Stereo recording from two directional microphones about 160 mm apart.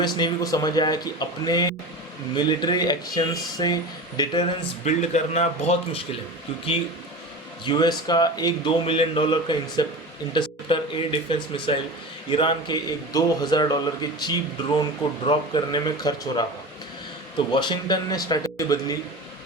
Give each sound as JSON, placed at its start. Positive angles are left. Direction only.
{"t": 0.0, "sound": "a man's voice", "side_deg": 25}
{"t": 4.9, "sound": "speech", "side_deg": 45}
{"t": 7.6, "sound": "a man's voice", "side_deg": 25}
{"t": 17.5, "sound": "a man's voice", "side_deg": 30}